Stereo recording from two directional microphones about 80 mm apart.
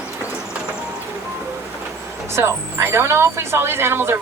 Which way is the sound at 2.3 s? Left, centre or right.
Right.